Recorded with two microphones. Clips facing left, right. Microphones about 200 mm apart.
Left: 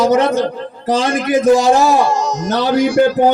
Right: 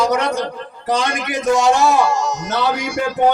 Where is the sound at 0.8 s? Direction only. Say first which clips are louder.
Left 5 dB; 30° left (ahead or behind).